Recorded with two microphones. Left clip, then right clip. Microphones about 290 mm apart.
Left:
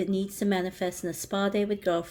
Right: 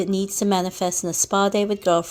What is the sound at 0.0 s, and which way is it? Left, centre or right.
A woman's voice, centre.